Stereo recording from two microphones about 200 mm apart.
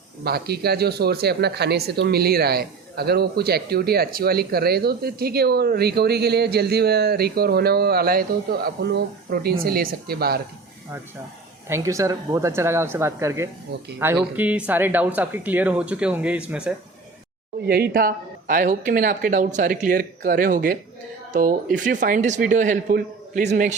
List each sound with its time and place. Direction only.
0.3 s speech: 50° right (ahead or behind)
11.7 s speech: 15° right (ahead or behind)
17.7 s speech: 55° right (ahead or behind); by 23.7 s 35° right (ahead or behind)